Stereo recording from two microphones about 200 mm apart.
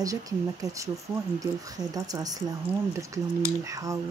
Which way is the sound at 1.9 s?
20° right (ahead or behind).